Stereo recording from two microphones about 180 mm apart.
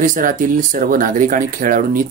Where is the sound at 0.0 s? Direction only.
45° right (ahead or behind).